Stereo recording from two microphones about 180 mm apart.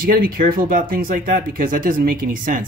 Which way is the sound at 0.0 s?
55° right (ahead or behind).